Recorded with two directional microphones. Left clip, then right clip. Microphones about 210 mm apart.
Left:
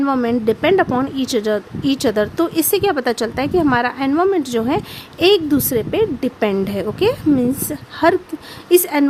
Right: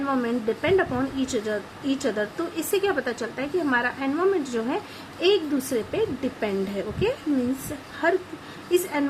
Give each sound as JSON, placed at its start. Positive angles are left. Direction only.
{"t": 0.0, "sound": "a woman's voice", "side_deg": 55}